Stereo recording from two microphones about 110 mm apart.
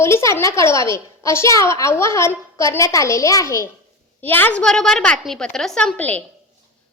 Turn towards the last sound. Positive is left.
turn(degrees=15)  # may be behind; listen again after turning